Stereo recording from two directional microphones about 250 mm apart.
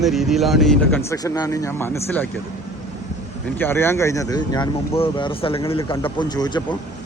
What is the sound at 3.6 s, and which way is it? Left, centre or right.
Speech, centre.